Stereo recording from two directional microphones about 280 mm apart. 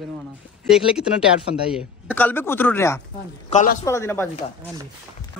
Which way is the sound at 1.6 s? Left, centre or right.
Centre.